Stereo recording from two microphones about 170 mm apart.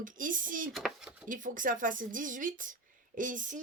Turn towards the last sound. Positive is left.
turn(degrees=-50)  # may be behind; listen again after turning